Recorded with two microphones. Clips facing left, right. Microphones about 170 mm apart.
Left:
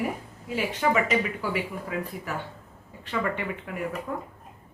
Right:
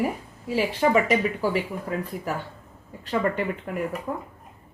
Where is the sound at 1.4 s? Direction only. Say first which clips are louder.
Right 4 dB; 40° right (ahead or behind).